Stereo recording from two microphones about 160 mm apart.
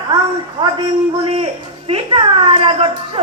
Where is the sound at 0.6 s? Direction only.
30° right (ahead or behind).